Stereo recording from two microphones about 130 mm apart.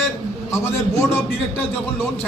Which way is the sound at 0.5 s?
20° left (ahead or behind).